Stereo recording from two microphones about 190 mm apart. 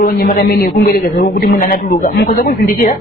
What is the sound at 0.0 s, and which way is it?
A man's voice, 50° left (ahead or behind).